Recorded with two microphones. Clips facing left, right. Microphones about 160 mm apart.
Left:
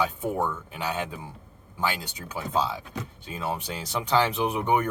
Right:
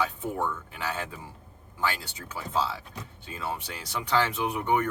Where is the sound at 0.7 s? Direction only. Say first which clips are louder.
Left 3 dB; 20° left (ahead or behind).